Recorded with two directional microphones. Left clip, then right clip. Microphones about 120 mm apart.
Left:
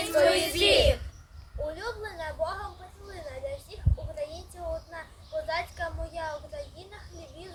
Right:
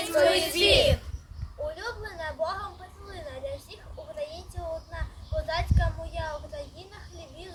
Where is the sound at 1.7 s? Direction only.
5° left (ahead or behind).